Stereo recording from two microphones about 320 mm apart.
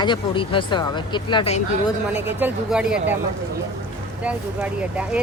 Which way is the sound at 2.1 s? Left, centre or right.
Centre.